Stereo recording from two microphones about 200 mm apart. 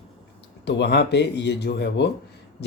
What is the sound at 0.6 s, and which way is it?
Speech, 60° left (ahead or behind).